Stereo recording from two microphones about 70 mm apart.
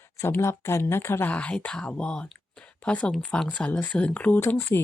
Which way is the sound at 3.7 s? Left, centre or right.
Left.